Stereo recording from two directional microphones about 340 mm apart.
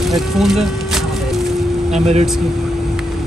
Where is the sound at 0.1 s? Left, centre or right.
Centre.